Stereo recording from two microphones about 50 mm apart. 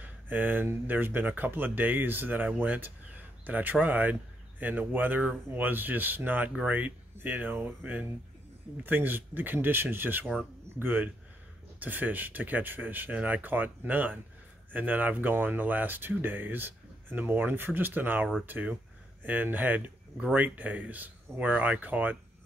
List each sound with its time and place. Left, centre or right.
0.3 s speech: right
2.6 s a sound: right
3.8 s speech: right